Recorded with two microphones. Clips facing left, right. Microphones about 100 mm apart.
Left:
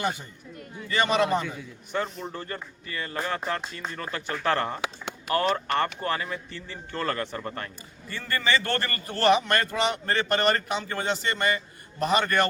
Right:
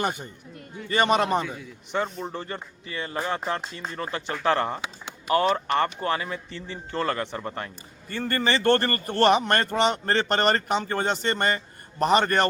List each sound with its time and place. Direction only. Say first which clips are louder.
0.9 s a man's voice: right 2 dB; 50° right (ahead or behind)
1.4 s a man's voice: right 2 dB; centre (ahead or behind)
2.2 s speech: right 2 dB; 25° right (ahead or behind)
8.1 s a man's voice: right 1 dB; 45° right (ahead or behind)